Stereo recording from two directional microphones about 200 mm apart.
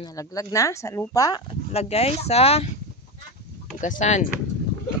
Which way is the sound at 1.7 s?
30° left (ahead or behind).